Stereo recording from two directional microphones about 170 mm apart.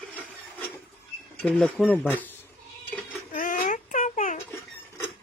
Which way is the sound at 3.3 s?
50° left (ahead or behind).